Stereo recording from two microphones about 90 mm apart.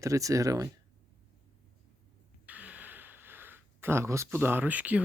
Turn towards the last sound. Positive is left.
turn(degrees=-15)  # may be behind; listen again after turning